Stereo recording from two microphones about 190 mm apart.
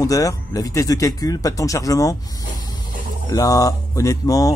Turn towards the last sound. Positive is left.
turn(degrees=20)  # may be behind; listen again after turning